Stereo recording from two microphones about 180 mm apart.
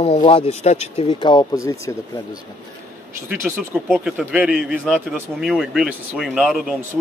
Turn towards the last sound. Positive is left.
turn(degrees=0)  # may be behind; listen again after turning